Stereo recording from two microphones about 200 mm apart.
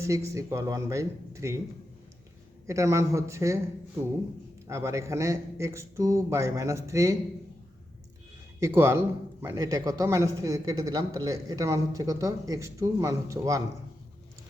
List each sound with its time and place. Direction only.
0.3 s a man's voice: 15° right (ahead or behind)
2.6 s a man's voice: 15° right (ahead or behind)
4.6 s a man's voice: 15° right (ahead or behind)
8.6 s a man's voice: 15° right (ahead or behind)